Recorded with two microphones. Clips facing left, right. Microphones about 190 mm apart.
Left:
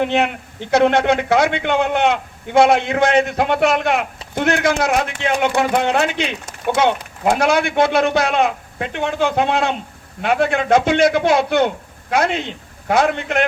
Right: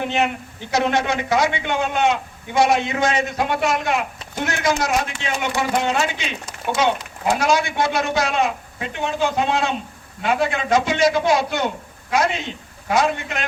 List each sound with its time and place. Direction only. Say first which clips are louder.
0.7 s speech: left 6 dB; 60° left (ahead or behind)